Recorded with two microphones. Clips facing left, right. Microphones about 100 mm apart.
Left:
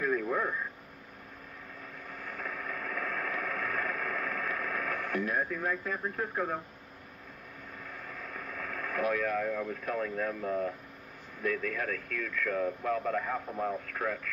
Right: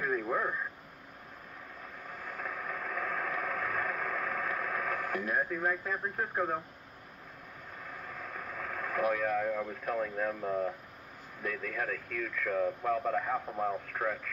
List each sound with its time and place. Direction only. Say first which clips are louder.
0.0 s radio: left 2 dB; 20° right (ahead or behind)
2.2 s radio: even; 20° right (ahead or behind)
8.3 s speech: even; 20° right (ahead or behind)